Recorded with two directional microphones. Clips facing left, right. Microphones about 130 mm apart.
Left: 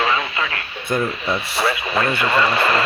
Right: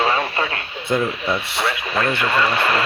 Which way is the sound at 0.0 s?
40° right (ahead or behind).